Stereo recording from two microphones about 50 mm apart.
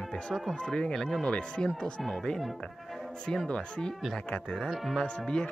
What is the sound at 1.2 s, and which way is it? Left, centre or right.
Speech, left.